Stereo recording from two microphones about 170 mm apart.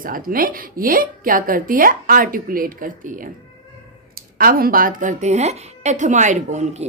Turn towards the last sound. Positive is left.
turn(degrees=-45)  # may be behind; listen again after turning